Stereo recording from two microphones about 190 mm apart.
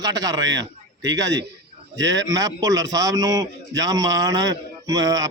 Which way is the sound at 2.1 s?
20° right (ahead or behind).